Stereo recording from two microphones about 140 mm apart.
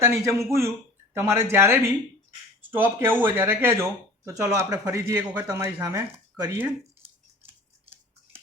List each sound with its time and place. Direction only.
0.0 s speech: 20° right (ahead or behind)